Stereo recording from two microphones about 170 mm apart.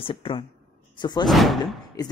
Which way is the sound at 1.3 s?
Centre (ahead or behind).